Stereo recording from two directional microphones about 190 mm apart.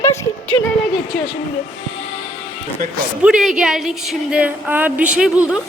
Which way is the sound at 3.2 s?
5° right (ahead or behind).